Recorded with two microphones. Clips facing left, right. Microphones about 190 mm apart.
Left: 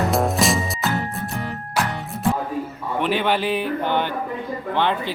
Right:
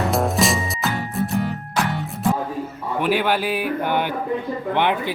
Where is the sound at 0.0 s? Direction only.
Centre (ahead or behind).